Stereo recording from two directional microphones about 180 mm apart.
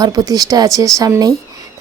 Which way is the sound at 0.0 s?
20° right (ahead or behind).